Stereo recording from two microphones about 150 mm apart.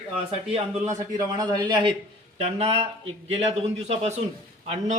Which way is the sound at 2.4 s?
45° right (ahead or behind).